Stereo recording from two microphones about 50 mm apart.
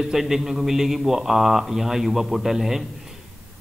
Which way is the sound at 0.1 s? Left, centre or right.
Centre.